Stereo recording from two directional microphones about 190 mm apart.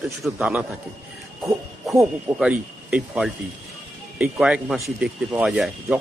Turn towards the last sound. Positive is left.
turn(degrees=-5)  # may be behind; listen again after turning